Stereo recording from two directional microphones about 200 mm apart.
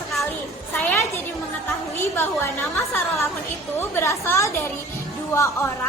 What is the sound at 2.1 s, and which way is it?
Speech, 15° left (ahead or behind).